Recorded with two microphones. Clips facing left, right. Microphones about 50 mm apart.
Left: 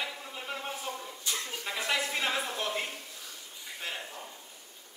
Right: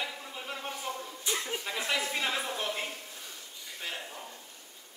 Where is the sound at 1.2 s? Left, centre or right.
Centre.